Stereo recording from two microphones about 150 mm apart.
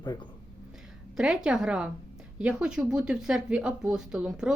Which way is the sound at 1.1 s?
5° right (ahead or behind).